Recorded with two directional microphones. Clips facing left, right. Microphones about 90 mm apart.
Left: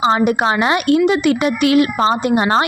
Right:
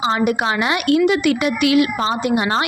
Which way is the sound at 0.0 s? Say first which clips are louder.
Left 4 dB; 30° left (ahead or behind).